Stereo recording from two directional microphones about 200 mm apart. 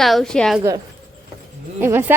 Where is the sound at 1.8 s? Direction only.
10° right (ahead or behind).